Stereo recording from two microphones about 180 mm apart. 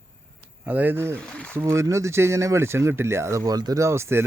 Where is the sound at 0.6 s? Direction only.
10° right (ahead or behind).